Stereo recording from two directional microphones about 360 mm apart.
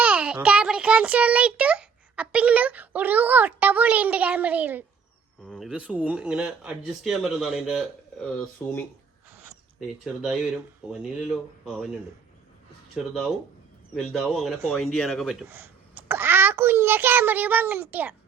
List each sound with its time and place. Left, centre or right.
0.0 s a child's voice: centre
10.0 s a man's voice: centre
13.9 s a man's voice: centre